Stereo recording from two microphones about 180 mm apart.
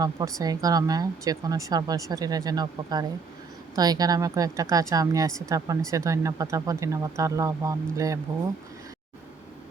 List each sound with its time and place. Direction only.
0.0 s a woman's voice: 20° right (ahead or behind)